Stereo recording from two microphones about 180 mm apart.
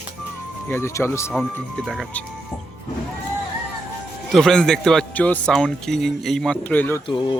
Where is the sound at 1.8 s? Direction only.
5° left (ahead or behind).